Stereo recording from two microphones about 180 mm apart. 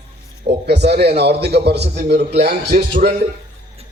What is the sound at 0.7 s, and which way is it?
A man's voice, 65° right (ahead or behind).